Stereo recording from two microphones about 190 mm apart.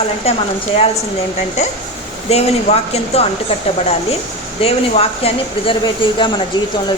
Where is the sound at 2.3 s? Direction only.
35° left (ahead or behind).